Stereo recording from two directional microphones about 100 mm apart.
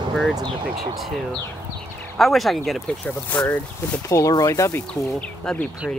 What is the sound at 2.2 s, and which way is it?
Speech, centre (ahead or behind).